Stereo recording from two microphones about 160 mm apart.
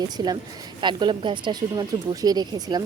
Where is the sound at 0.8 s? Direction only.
30° right (ahead or behind).